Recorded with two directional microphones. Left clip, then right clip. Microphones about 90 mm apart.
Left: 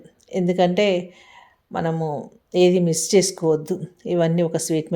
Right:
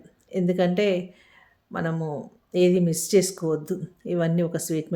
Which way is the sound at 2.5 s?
25° left (ahead or behind).